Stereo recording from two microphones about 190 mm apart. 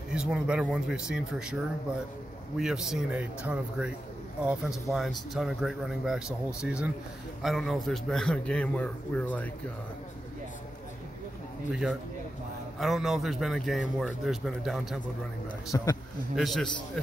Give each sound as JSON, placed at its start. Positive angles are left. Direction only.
{"t": 0.1, "sound": "a man's voice", "side_deg": -5}
{"t": 2.6, "sound": "a man's voice", "side_deg": 0}
{"t": 12.7, "sound": "a man's voice", "side_deg": 0}
{"t": 15.7, "sound": "a man's voice", "side_deg": 15}
{"t": 16.3, "sound": "a man's voice", "side_deg": 0}